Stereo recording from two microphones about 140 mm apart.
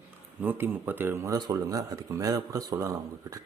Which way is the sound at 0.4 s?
15° right (ahead or behind).